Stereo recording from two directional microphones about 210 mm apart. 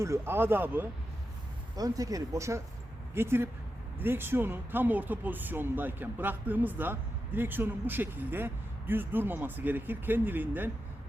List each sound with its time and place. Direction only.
0.0 s speech: 10° right (ahead or behind)